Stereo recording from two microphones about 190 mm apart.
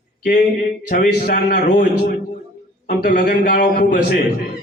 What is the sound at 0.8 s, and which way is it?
A man's voice, 45° left (ahead or behind).